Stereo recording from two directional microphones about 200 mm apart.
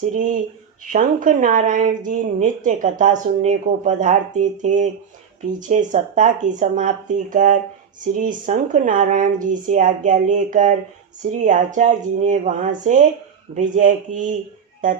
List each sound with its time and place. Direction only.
0.0 s speech: 40° right (ahead or behind)